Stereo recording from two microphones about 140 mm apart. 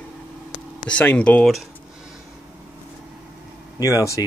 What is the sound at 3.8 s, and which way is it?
Speech, 20° left (ahead or behind).